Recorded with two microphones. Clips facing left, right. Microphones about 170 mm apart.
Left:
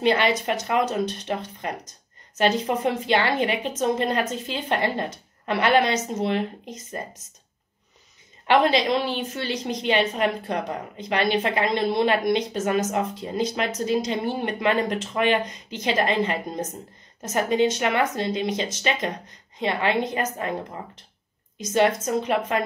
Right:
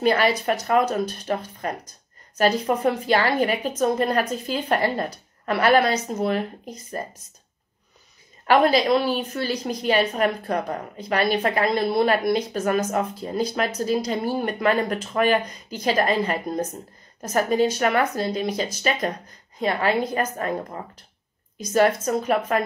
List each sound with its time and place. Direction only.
0.0 s a woman's voice: 25° left (ahead or behind)
2.3 s a woman's voice: 25° left (ahead or behind)
9.0 s a woman's voice: 25° left (ahead or behind)
21.5 s a woman's voice: 20° left (ahead or behind)